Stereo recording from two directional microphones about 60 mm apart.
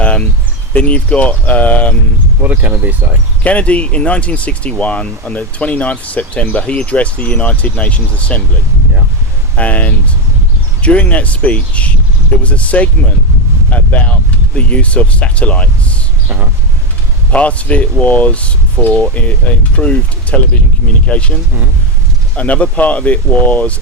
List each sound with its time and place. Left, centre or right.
0.0 s a sound: left
0.7 s speech: left
2.4 s speech: right
3.4 s speech: left
9.6 s speech: left
17.3 s speech: left
22.4 s speech: left